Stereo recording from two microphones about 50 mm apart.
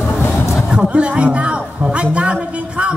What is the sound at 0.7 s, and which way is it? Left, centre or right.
Music, right.